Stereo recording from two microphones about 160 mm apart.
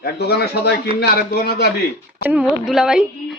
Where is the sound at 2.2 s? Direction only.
5° right (ahead or behind).